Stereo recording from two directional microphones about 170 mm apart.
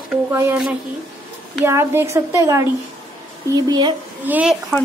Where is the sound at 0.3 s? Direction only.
15° right (ahead or behind).